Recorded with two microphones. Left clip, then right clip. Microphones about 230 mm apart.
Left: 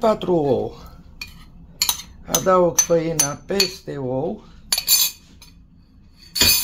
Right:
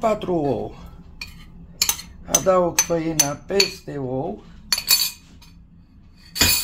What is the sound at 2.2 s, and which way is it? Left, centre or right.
Cutlery, left.